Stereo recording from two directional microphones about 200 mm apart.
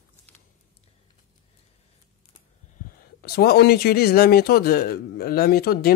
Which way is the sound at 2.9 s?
50° left (ahead or behind).